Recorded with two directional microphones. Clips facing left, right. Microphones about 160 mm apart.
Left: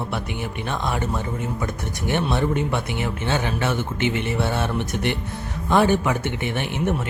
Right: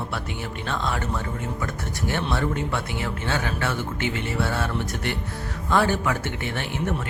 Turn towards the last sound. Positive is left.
turn(degrees=20)  # may be behind; listen again after turning